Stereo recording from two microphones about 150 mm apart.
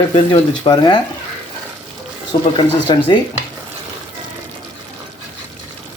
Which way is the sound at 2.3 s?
30° left (ahead or behind).